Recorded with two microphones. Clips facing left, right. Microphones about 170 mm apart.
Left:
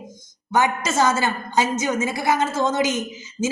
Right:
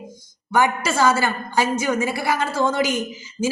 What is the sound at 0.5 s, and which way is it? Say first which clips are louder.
A woman's voice: right 1 dB; 20° left (ahead or behind).